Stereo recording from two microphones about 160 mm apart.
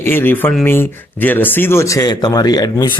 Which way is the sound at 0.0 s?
15° left (ahead or behind).